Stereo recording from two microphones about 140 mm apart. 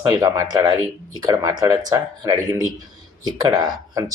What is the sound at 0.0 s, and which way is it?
Speech, 25° right (ahead or behind).